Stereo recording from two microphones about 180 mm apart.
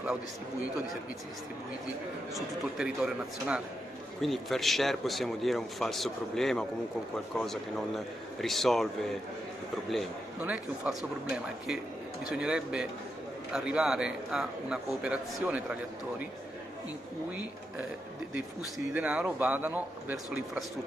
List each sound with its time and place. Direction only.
2.3 s a man's voice: centre (ahead or behind)
9.8 s a man's voice: centre (ahead or behind)
18.9 s speech: 10° right (ahead or behind)